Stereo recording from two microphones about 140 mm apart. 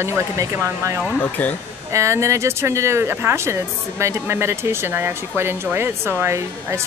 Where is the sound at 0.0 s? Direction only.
20° right (ahead or behind).